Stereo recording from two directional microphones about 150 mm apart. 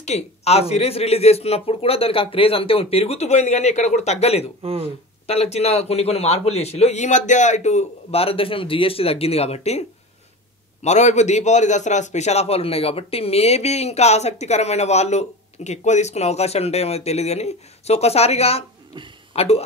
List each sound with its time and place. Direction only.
0.0 s a man's voice: 45° left (ahead or behind)